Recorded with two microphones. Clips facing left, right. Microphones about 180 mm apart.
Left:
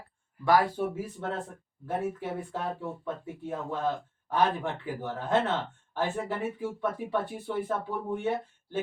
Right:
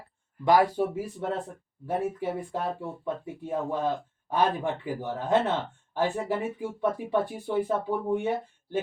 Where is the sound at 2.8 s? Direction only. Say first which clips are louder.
Right 2 dB; 15° right (ahead or behind).